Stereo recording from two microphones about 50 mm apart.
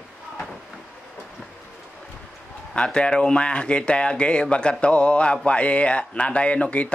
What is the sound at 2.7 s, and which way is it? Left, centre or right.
Speech, centre.